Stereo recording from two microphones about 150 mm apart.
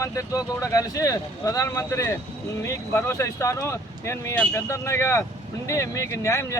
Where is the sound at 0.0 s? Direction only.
20° left (ahead or behind).